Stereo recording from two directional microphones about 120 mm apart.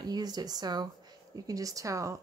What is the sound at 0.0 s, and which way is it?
Speech, 35° right (ahead or behind).